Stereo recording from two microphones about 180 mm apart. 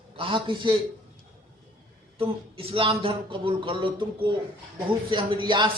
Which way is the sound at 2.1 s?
30° right (ahead or behind).